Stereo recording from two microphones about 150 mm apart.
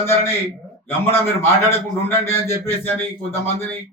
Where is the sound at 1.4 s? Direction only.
15° left (ahead or behind).